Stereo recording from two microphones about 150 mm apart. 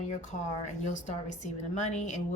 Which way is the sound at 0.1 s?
55° left (ahead or behind).